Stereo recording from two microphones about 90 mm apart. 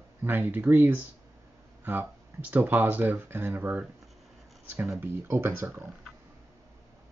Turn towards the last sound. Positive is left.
turn(degrees=-25)  # may be behind; listen again after turning